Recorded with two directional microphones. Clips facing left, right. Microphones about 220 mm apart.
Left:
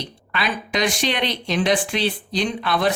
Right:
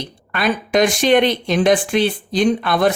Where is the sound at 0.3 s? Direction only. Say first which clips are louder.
Right 7 dB; 50° right (ahead or behind).